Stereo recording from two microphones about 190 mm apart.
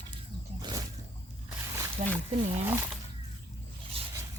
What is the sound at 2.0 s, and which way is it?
Speech, 40° right (ahead or behind).